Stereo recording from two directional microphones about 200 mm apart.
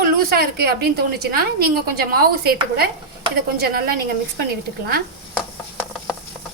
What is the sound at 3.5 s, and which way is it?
Speech, 50° right (ahead or behind).